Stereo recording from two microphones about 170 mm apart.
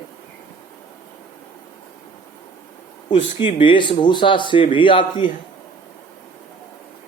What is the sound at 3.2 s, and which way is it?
Speech, 30° left (ahead or behind).